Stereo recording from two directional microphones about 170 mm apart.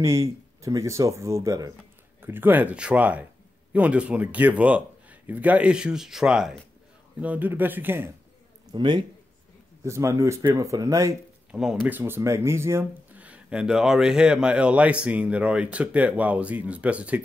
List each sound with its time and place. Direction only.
0.0 s speech: 15° right (ahead or behind)
8.7 s speech: 25° right (ahead or behind)
9.8 s speech: 15° right (ahead or behind)
11.5 s speech: 5° right (ahead or behind)
12.0 s speech: 15° right (ahead or behind)